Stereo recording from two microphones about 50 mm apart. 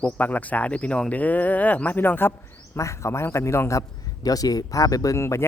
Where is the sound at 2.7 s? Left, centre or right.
Left.